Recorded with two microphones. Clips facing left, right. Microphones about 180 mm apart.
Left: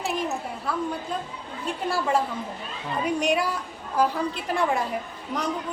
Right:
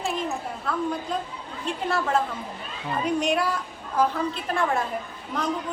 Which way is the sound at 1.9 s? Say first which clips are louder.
Even; 10° left (ahead or behind).